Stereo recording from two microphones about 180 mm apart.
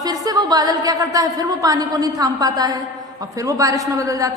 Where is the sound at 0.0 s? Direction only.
20° right (ahead or behind).